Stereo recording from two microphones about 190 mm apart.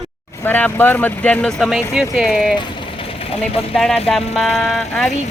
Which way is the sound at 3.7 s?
Centre (ahead or behind).